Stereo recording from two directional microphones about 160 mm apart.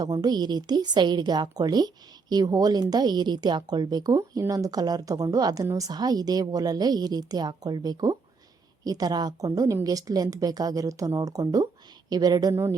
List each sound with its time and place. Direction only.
0.0 s speech: 25° right (ahead or behind)